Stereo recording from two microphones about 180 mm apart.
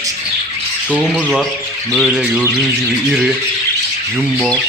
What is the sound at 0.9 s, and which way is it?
Speech, centre (ahead or behind).